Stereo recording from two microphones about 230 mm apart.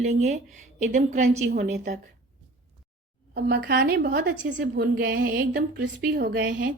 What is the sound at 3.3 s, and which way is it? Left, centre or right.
A woman's voice, right.